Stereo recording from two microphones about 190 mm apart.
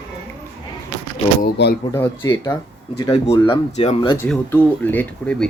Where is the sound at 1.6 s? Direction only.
65° left (ahead or behind).